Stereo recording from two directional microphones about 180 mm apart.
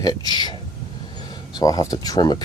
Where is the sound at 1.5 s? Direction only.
20° left (ahead or behind).